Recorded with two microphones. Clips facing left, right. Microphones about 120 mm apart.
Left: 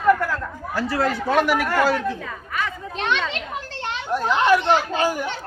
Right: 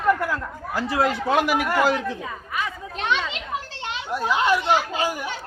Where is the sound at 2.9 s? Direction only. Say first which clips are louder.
Left 1 dB; 5° right (ahead or behind).